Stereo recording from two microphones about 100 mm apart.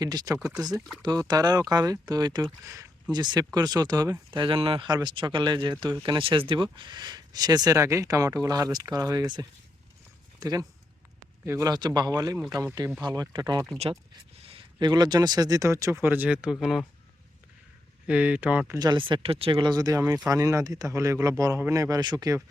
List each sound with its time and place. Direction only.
0.0 s speech: 40° right (ahead or behind)
4.3 s speech: 55° right (ahead or behind)
4.9 s speech: 50° right (ahead or behind)
14.4 s a sound: 70° right (ahead or behind)
14.8 s speech: 45° right (ahead or behind); by 16.8 s 5° right (ahead or behind)
18.0 s speech: 15° right (ahead or behind)
18.8 s speech: 50° right (ahead or behind)